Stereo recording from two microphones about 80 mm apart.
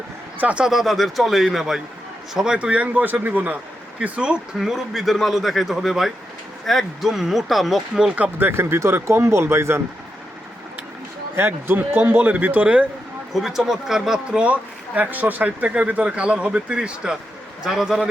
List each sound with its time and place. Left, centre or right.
0.3 s a man's voice: centre
0.7 s a man's voice: centre
4.6 s a man's voice: centre
8.1 s speech: right
11.3 s a man's voice: right
13.3 s a man's voice: centre